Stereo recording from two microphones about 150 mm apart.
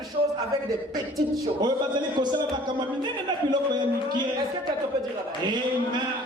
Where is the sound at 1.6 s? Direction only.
30° right (ahead or behind).